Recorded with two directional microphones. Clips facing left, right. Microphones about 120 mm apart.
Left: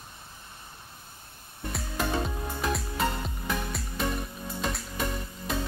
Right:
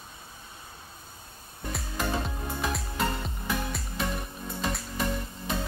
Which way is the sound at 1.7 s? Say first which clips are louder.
Left 1 dB; centre (ahead or behind).